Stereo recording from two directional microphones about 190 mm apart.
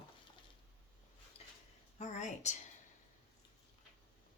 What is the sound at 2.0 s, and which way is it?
Speech, 35° left (ahead or behind).